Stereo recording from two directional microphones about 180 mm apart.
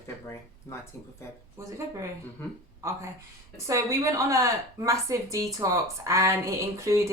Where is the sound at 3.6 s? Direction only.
15° right (ahead or behind).